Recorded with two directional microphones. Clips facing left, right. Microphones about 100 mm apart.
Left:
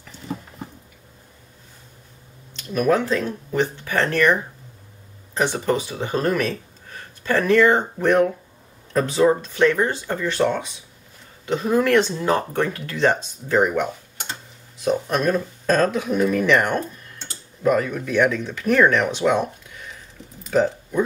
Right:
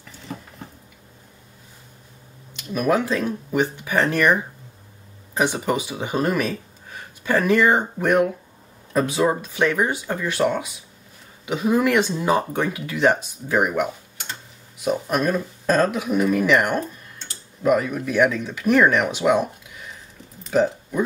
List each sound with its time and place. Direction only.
2.5 s speech: 10° right (ahead or behind)
14.9 s speech: 10° right (ahead or behind)
20.4 s speech: 5° right (ahead or behind)